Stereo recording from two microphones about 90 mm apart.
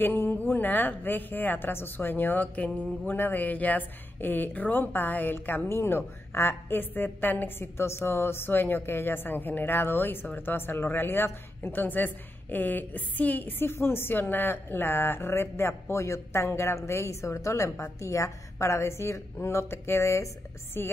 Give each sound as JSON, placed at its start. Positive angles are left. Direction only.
{"t": 0.0, "sound": "a woman's voice", "side_deg": 20}
{"t": 19.4, "sound": "a sound", "side_deg": 30}
{"t": 20.8, "sound": "a woman's voice", "side_deg": 25}